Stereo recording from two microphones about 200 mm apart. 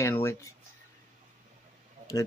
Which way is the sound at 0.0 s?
15° left (ahead or behind).